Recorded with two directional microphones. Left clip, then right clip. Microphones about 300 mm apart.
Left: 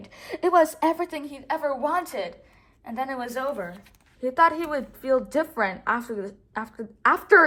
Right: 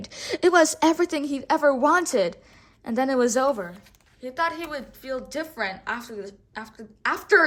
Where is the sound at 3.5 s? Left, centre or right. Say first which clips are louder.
Even; centre.